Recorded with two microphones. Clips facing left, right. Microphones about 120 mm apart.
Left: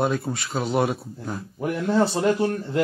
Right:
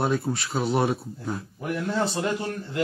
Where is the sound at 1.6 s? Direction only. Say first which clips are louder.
Left 5 dB; 40° left (ahead or behind).